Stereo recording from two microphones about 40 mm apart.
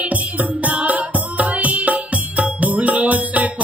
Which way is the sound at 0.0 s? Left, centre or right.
Right.